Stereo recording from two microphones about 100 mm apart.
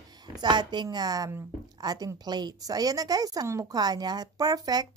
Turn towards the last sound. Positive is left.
turn(degrees=-40)  # may be behind; listen again after turning